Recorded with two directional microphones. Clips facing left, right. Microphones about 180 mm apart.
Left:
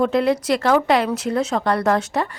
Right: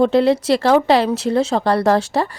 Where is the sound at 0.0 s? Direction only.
30° right (ahead or behind).